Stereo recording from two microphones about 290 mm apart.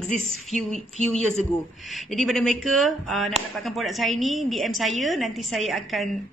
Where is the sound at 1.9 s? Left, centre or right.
Centre.